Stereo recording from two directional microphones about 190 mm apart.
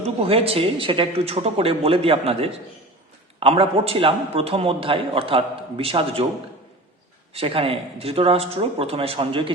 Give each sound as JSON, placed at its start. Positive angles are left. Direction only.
{"t": 0.0, "sound": "a man's voice", "side_deg": -30}
{"t": 7.3, "sound": "speech", "side_deg": -30}